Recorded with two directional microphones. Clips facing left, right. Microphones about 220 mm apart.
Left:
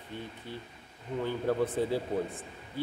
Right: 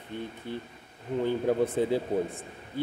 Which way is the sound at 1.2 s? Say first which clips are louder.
Right 4 dB; 20° right (ahead or behind).